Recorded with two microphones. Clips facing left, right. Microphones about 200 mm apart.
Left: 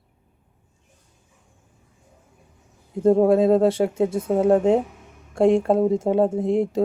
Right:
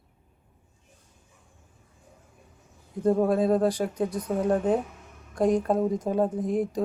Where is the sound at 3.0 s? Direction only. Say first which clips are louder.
Left 6 dB; 25° left (ahead or behind).